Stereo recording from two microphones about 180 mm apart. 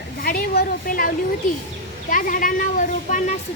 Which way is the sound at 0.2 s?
55° left (ahead or behind).